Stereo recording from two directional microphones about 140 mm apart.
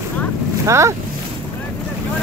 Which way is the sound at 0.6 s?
20° right (ahead or behind).